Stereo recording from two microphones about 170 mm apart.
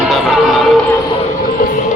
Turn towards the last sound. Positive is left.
turn(degrees=0)  # may be behind; listen again after turning